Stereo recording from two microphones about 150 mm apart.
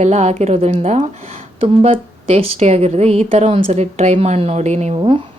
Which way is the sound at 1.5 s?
40° right (ahead or behind).